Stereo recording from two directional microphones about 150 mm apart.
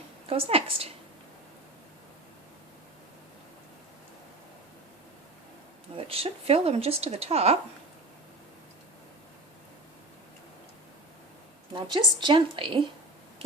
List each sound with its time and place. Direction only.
0.3 s a woman's voice: 40° right (ahead or behind)
6.1 s speech: 40° right (ahead or behind)
11.7 s a woman's voice: 30° right (ahead or behind)